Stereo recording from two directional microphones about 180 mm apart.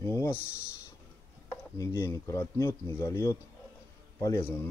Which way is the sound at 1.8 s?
15° left (ahead or behind).